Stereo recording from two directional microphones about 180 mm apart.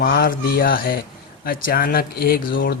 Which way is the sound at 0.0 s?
55° left (ahead or behind).